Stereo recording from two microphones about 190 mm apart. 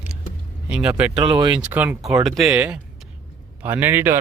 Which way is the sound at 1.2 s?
25° right (ahead or behind).